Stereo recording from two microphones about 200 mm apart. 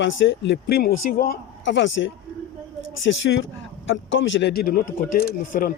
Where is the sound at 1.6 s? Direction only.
65° left (ahead or behind); by 5.7 s 45° left (ahead or behind).